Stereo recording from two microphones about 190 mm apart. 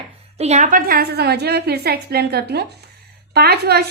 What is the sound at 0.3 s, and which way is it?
A woman's voice, 35° right (ahead or behind).